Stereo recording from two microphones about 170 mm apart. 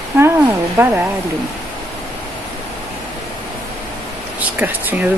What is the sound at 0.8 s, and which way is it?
Speech, 15° right (ahead or behind).